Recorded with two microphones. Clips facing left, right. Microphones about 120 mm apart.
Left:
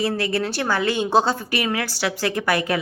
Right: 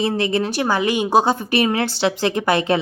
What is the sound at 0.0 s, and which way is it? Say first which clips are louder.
A woman's voice: right 3 dB; 20° right (ahead or behind).